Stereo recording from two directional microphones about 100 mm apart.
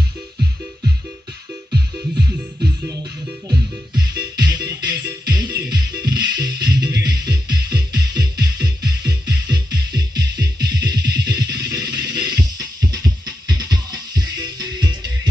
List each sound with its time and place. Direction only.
2.6 s music: 40° right (ahead or behind)